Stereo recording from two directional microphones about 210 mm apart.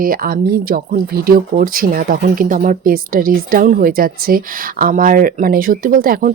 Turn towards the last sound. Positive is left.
turn(degrees=-40)  # may be behind; listen again after turning